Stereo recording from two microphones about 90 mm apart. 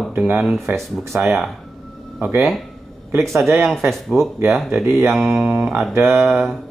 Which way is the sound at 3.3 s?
30° right (ahead or behind).